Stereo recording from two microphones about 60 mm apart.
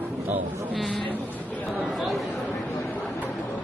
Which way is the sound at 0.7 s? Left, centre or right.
Centre.